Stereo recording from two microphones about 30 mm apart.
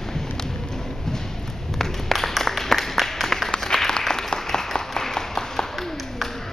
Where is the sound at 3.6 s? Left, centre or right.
Centre.